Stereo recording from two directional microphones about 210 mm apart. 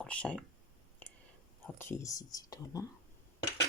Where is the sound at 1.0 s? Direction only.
10° left (ahead or behind).